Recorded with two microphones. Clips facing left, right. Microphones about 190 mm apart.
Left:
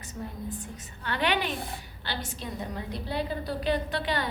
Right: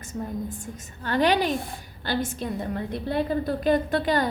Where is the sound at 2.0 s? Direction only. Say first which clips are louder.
Right 9 dB; 50° right (ahead or behind).